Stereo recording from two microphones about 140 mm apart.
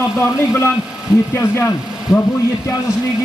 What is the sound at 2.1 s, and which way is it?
Speech, 5° right (ahead or behind).